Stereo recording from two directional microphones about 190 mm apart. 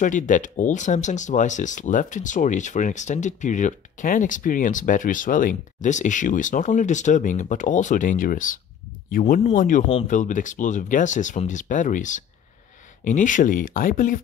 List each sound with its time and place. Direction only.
0.0 s speech: 40° left (ahead or behind)